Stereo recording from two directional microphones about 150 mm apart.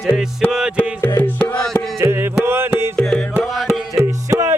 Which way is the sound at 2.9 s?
5° left (ahead or behind).